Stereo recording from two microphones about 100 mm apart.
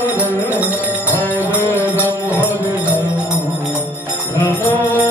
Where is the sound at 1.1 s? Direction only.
15° left (ahead or behind).